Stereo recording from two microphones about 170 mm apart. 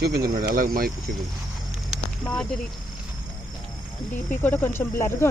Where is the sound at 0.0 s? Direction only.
65° right (ahead or behind).